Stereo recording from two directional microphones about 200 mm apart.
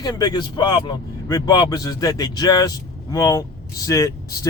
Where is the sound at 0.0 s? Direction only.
20° left (ahead or behind).